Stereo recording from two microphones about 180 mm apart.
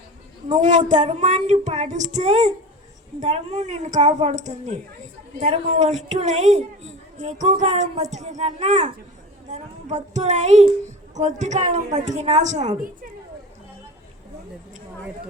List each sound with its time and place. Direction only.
0.5 s a woman's voice: 40° right (ahead or behind)